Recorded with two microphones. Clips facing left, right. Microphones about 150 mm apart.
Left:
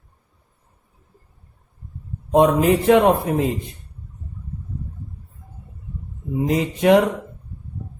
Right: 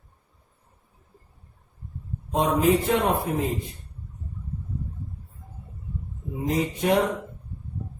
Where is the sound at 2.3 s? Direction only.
70° left (ahead or behind).